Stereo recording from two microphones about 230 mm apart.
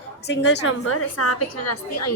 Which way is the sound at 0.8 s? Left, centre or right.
Left.